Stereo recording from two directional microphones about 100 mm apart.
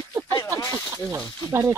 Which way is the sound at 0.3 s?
40° left (ahead or behind).